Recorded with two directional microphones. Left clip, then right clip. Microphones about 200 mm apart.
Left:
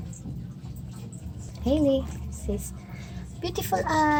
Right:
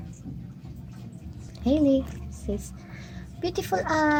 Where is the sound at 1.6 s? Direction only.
15° right (ahead or behind).